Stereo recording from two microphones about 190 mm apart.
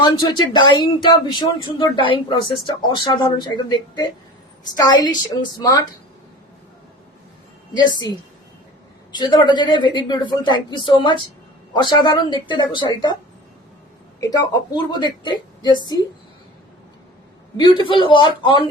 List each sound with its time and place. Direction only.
0.0 s speech: 25° left (ahead or behind)
7.8 s speech: 20° left (ahead or behind)
9.1 s speech: 25° left (ahead or behind)
14.2 s speech: 20° left (ahead or behind)
17.6 s speech: 25° left (ahead or behind)